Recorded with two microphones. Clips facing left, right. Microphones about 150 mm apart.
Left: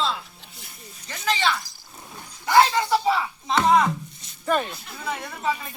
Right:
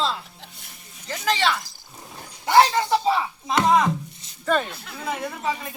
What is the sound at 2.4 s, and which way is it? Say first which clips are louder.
Speech: right 1 dB; 25° right (ahead or behind).